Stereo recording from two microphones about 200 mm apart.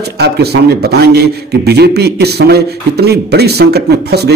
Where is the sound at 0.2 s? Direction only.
55° right (ahead or behind).